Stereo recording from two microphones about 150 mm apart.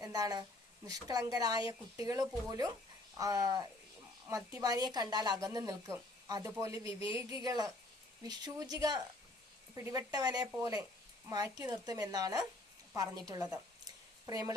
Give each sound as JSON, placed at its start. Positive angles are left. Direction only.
{"t": 0.0, "sound": "speech", "side_deg": -25}